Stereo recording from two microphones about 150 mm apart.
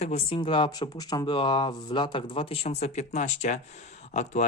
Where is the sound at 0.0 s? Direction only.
40° left (ahead or behind).